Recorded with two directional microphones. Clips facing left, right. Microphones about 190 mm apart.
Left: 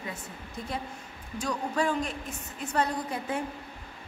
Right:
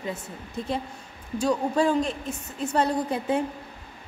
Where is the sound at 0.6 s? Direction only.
25° right (ahead or behind).